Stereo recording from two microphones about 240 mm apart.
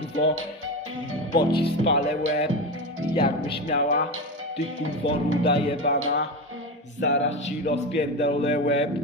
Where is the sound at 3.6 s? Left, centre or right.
Left.